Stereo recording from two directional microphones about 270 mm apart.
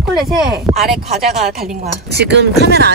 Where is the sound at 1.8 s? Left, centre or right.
Right.